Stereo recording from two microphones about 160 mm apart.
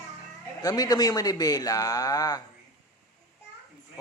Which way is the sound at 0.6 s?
25° left (ahead or behind).